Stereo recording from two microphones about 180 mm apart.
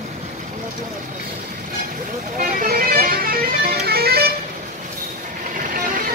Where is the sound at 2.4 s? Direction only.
50° right (ahead or behind).